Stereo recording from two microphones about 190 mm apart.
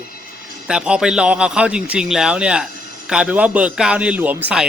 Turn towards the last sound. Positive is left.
turn(degrees=-10)  # may be behind; listen again after turning